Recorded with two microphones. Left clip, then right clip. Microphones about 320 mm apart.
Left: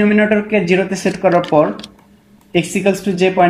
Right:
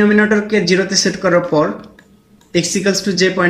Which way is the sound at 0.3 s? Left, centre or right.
Centre.